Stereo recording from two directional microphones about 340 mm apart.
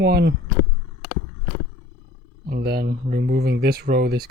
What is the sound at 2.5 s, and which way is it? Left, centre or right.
Speech, right.